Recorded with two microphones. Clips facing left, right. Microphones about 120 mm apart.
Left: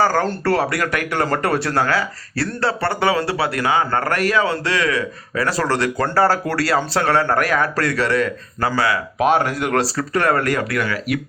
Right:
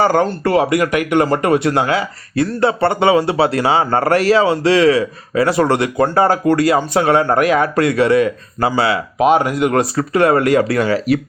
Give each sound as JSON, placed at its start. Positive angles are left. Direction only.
{"t": 0.0, "sound": "speech", "side_deg": -20}
{"t": 9.1, "sound": "speech", "side_deg": -5}
{"t": 9.9, "sound": "speech", "side_deg": -20}